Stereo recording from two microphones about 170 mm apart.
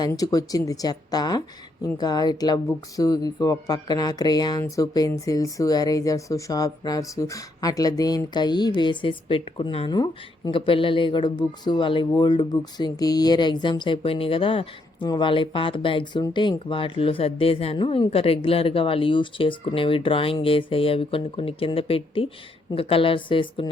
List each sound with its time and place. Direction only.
0.0 s a woman's voice: 20° left (ahead or behind)